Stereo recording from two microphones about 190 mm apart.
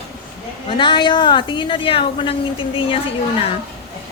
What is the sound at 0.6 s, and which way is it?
A woman's voice, 25° left (ahead or behind).